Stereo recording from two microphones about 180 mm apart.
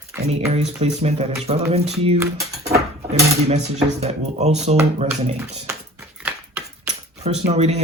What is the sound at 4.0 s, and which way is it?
Speech, 35° right (ahead or behind).